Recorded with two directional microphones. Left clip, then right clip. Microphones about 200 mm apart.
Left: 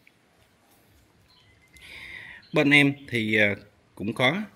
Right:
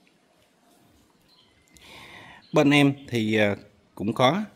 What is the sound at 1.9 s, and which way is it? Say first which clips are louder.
Speech: left 4 dB; 15° right (ahead or behind).